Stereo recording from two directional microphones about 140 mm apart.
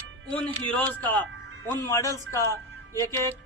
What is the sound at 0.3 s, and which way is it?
A man's voice, 10° left (ahead or behind).